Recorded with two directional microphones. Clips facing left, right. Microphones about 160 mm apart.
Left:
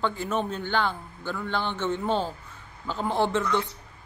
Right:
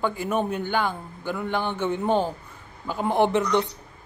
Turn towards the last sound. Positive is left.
turn(degrees=-15)  # may be behind; listen again after turning